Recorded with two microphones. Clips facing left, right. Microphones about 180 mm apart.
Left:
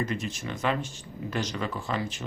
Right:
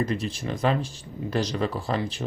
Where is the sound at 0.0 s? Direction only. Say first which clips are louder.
Right 4 dB; 35° right (ahead or behind).